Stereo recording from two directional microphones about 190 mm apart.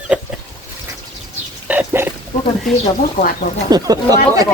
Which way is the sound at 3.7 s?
20° right (ahead or behind).